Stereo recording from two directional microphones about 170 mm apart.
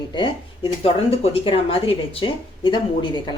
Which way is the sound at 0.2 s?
35° left (ahead or behind).